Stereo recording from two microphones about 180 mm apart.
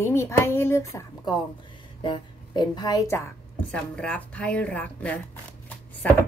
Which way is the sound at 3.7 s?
5° left (ahead or behind).